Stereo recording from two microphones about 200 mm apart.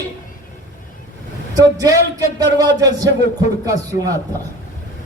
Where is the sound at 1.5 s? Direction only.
15° right (ahead or behind).